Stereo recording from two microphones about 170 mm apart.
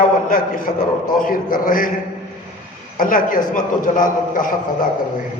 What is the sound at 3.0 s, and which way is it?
A man's voice, 55° left (ahead or behind).